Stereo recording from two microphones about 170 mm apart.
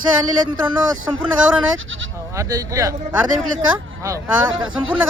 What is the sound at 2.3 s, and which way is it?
Speech, 20° right (ahead or behind).